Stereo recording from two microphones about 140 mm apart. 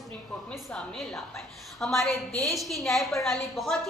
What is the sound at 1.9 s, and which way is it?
Speech, 20° left (ahead or behind).